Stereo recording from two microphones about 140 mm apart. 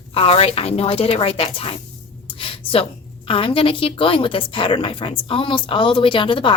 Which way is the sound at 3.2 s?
40° left (ahead or behind).